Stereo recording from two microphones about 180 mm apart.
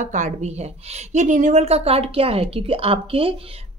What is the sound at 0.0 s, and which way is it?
A woman's voice, 45° right (ahead or behind).